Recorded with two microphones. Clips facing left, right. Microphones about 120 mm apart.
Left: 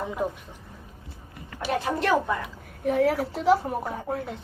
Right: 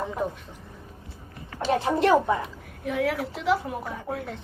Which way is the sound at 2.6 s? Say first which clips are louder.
Left 5 dB; 40° left (ahead or behind).